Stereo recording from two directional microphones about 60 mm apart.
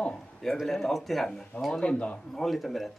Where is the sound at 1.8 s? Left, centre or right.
Centre.